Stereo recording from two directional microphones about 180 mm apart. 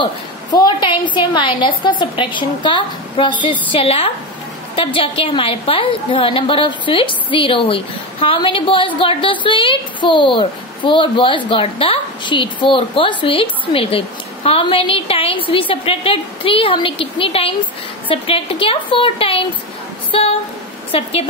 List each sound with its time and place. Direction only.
0.0 s a woman's voice: 20° left (ahead or behind)